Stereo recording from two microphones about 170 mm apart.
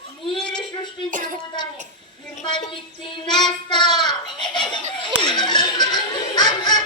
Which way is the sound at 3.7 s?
25° left (ahead or behind).